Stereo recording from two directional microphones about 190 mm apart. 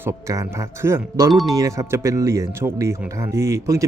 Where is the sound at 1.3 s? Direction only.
Centre (ahead or behind).